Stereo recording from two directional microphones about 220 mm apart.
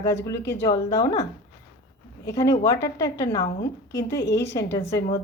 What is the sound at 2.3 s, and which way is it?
A woman's voice, 15° left (ahead or behind).